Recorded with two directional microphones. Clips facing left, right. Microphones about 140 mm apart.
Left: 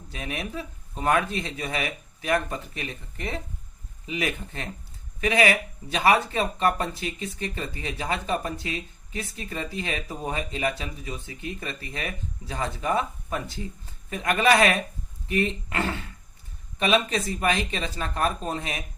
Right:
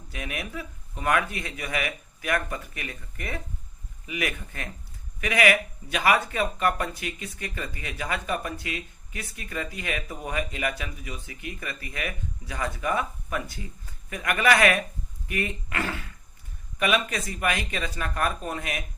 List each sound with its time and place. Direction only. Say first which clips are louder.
0.1 s speech: left 2 dB; 30° left (ahead or behind)